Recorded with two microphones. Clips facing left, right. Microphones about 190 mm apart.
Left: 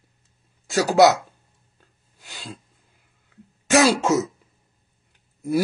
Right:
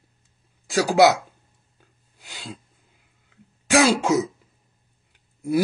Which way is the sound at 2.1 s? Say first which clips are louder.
Even; 15° right (ahead or behind).